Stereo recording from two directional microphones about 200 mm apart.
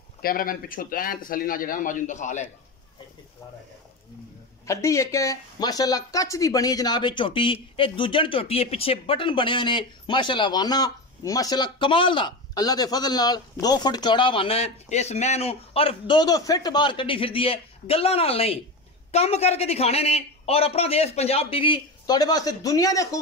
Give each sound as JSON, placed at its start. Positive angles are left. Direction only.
{"t": 0.2, "sound": "a man's voice", "side_deg": 45}
{"t": 4.6, "sound": "speech", "side_deg": 15}